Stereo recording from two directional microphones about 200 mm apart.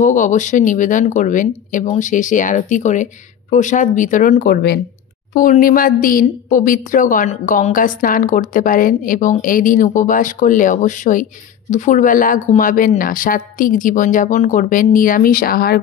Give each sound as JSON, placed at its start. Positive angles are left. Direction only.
{"t": 0.0, "sound": "a woman's voice", "side_deg": 40}